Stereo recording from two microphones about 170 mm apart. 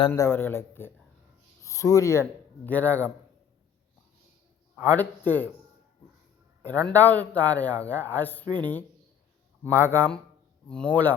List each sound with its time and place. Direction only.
0.1 s speech: 15° left (ahead or behind)
4.7 s a man's voice: 10° left (ahead or behind)
6.7 s speech: 10° left (ahead or behind)
9.6 s speech: 15° left (ahead or behind)